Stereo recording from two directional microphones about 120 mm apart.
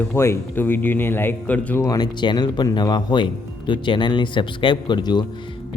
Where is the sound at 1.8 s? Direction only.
30° left (ahead or behind).